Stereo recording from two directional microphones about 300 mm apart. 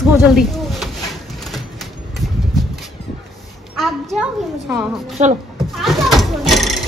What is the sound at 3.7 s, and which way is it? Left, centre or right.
A child's voice, centre.